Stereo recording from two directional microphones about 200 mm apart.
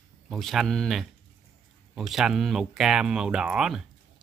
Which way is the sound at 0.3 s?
Centre (ahead or behind).